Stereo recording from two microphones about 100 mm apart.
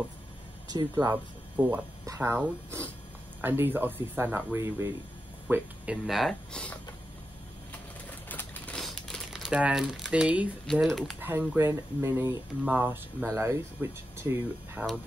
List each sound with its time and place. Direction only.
0.7 s speech: 40° right (ahead or behind)
1.1 s speech: 20° right (ahead or behind)
6.0 s speech: centre (ahead or behind)
6.5 s speech: 10° left (ahead or behind)
8.3 s a sound: 15° left (ahead or behind)
8.7 s crumpling: 5° left (ahead or behind); by 10.5 s 10° right (ahead or behind)
10.7 s speech: 5° left (ahead or behind)
11.1 s speech: 20° right (ahead or behind)